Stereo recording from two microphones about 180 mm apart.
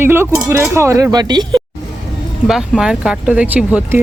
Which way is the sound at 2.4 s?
Centre (ahead or behind).